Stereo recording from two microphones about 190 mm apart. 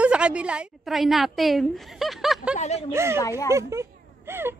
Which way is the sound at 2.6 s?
35° left (ahead or behind).